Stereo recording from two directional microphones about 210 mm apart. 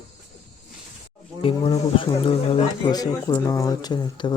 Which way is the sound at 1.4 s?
25° left (ahead or behind).